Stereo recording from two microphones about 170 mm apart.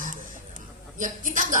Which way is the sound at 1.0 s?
50° right (ahead or behind).